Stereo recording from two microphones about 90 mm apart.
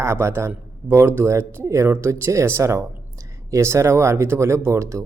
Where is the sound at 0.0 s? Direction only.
30° right (ahead or behind).